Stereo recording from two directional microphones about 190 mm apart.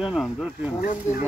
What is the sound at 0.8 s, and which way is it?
Speech, 40° left (ahead or behind).